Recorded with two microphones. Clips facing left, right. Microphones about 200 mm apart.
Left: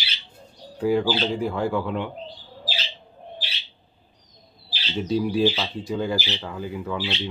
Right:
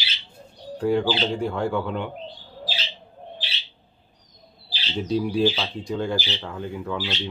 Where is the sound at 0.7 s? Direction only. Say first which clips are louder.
Even; centre (ahead or behind).